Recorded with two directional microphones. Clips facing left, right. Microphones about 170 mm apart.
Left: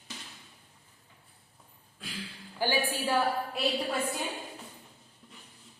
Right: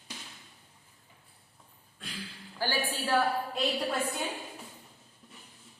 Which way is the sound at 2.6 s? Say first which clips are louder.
Left 3 dB; 15° left (ahead or behind).